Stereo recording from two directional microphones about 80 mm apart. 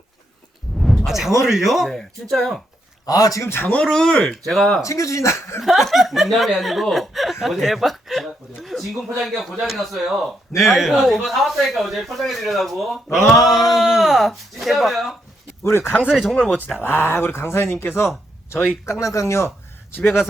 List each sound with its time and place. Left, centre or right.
0.8 s a sound: centre
1.5 s speech: centre
1.9 s speech: centre
3.1 s speech: left
3.8 s speech: centre
4.8 s speech: left
5.6 s speech: centre
13.2 s a sound: left
13.7 s speech: centre
15.6 s speech: left
16.0 s speech: centre
16.8 s speech: left
18.9 s speech: left
19.9 s a man's voice: left